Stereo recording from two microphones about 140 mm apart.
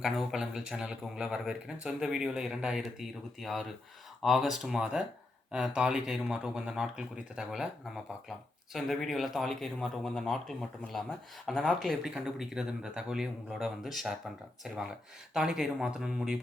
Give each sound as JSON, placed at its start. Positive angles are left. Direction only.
{"t": 0.0, "sound": "a man's voice", "side_deg": 0}
{"t": 8.7, "sound": "a man's voice", "side_deg": 0}